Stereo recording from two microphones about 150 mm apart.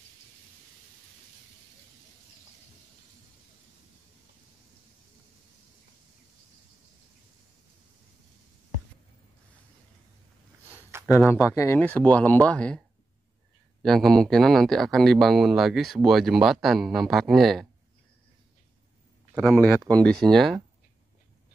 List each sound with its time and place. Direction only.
10.7 s a sound: 15° right (ahead or behind)
11.1 s speech: 15° left (ahead or behind)
13.8 s speech: centre (ahead or behind)
19.3 s speech: 5° right (ahead or behind)